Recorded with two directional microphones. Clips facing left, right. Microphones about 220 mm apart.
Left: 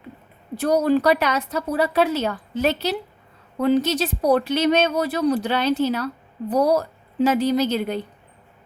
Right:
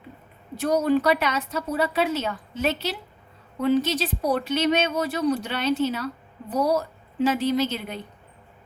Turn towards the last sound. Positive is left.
turn(degrees=40)  # may be behind; listen again after turning